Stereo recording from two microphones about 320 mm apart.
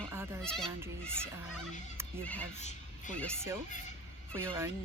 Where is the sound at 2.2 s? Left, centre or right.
Centre.